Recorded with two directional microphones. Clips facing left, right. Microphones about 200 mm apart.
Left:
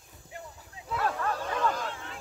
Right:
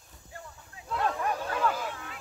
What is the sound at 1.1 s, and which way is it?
Bow-wow, 15° right (ahead or behind).